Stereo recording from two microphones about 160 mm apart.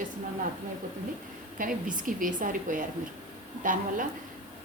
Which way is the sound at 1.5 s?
60° right (ahead or behind).